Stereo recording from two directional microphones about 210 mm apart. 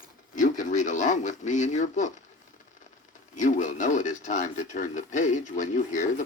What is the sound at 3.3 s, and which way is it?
Speech, 35° left (ahead or behind).